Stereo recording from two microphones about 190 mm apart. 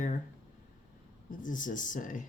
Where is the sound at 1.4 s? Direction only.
45° left (ahead or behind).